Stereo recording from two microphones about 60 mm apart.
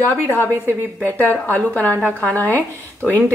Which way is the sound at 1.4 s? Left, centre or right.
Left.